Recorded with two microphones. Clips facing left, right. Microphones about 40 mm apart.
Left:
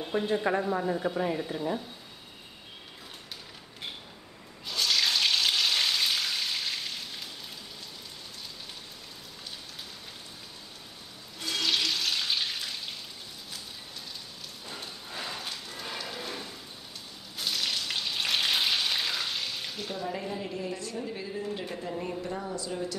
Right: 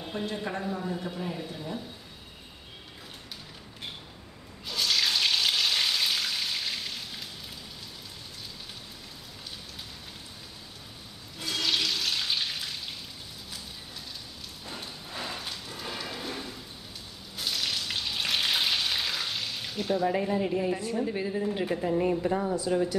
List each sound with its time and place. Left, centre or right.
0.3 s speech: left
4.6 s frying: centre
11.3 s water tap: centre
14.7 s rain: centre
17.4 s frying: centre
20.1 s a woman's voice: right